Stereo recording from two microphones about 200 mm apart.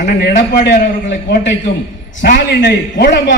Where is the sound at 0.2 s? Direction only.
50° left (ahead or behind).